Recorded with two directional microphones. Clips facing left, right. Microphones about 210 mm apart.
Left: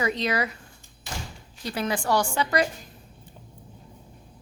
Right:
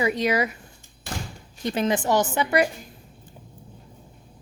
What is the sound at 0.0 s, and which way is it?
Speech, 15° right (ahead or behind).